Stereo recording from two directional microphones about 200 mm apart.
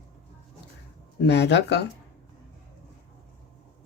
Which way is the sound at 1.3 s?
60° left (ahead or behind).